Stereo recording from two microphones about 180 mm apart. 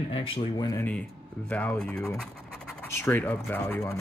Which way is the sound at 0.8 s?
10° left (ahead or behind).